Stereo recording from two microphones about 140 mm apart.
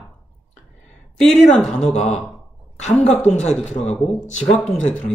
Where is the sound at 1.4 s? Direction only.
5° left (ahead or behind).